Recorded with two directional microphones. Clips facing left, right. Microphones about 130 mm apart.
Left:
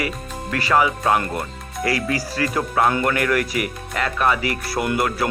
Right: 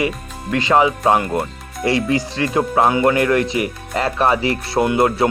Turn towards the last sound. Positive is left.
turn(degrees=-25)  # may be behind; listen again after turning